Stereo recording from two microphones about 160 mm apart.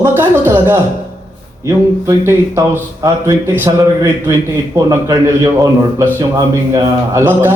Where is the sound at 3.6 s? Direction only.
20° right (ahead or behind).